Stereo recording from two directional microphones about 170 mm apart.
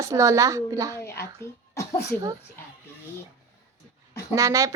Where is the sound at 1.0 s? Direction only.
15° left (ahead or behind).